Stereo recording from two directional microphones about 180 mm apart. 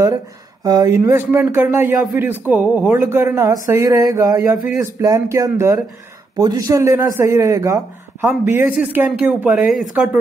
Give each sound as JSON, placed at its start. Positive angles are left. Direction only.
{"t": 0.7, "sound": "speech", "side_deg": -20}